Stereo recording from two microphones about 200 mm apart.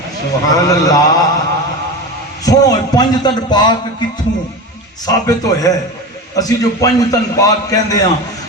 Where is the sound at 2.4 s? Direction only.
20° left (ahead or behind).